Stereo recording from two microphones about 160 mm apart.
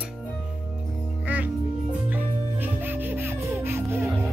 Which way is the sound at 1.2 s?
10° right (ahead or behind).